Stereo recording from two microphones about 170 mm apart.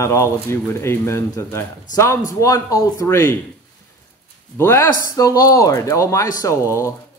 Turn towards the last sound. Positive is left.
turn(degrees=15)  # may be behind; listen again after turning